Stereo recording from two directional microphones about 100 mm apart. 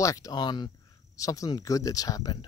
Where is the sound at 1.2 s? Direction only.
35° left (ahead or behind).